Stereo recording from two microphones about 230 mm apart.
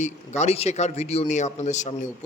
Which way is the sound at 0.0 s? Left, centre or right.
Left.